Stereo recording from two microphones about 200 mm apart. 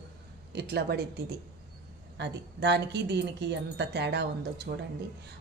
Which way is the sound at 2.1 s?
60° right (ahead or behind).